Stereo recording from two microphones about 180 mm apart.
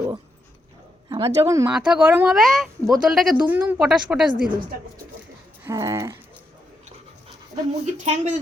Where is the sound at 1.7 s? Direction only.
5° right (ahead or behind).